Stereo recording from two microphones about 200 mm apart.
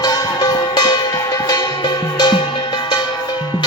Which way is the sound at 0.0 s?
20° left (ahead or behind).